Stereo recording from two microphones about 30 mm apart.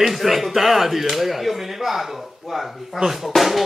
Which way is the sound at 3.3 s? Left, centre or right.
Centre.